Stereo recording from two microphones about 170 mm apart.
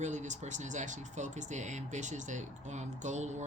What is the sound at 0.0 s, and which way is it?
Speech, 45° right (ahead or behind).